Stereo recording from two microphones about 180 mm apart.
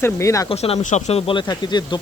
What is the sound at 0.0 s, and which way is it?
Speech, 15° left (ahead or behind).